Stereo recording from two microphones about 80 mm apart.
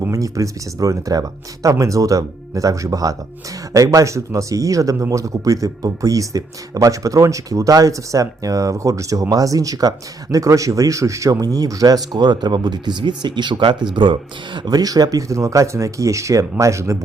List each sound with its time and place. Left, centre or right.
0.1 s speech: right
14.7 s speech: right